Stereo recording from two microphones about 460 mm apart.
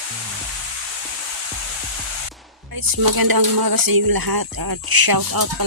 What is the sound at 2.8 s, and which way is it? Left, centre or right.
Speech, right.